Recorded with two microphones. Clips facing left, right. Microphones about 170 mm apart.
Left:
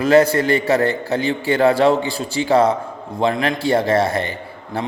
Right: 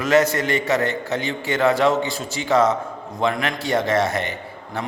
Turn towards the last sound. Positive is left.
turn(degrees=30)  # may be behind; listen again after turning